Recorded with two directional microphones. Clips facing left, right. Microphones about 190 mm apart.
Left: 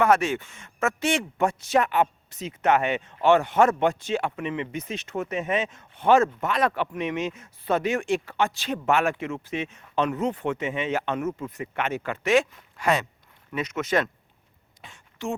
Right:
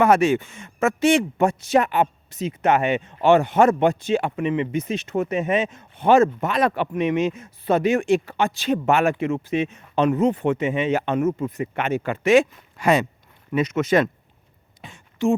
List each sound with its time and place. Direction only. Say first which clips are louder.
0.0 s speech: right 4 dB; 10° right (ahead or behind)
11.3 s speech: right 7 dB; 30° right (ahead or behind)
12.3 s speech: right 5 dB; 5° right (ahead or behind)
14.8 s a sound: right 11 dB; 5° right (ahead or behind)